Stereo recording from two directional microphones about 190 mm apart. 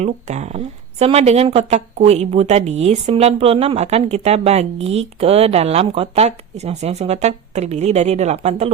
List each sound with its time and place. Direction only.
0.0 s speech: 35° right (ahead or behind)